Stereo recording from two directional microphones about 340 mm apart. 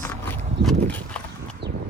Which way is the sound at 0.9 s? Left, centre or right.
Centre.